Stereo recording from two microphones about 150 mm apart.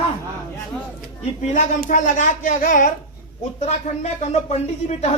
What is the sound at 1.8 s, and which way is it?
Speech, 60° left (ahead or behind).